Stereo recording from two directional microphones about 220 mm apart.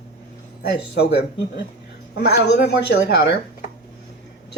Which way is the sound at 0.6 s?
45° left (ahead or behind).